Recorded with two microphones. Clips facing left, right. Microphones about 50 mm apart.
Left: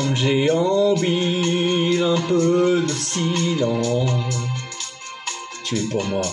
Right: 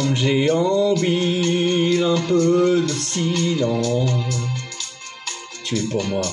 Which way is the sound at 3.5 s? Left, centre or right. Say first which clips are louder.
Even; left.